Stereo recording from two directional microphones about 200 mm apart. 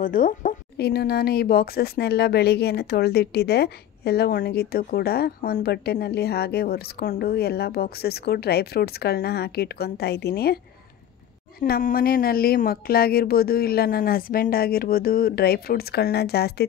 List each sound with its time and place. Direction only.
0.0 s a woman's voice: 45° left (ahead or behind)
11.6 s a woman's voice: 50° left (ahead or behind)